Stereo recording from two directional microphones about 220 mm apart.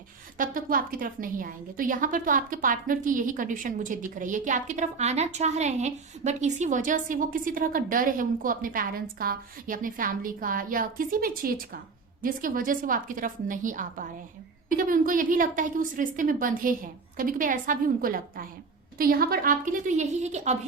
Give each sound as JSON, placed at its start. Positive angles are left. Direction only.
{"t": 0.3, "sound": "a woman's voice", "side_deg": -40}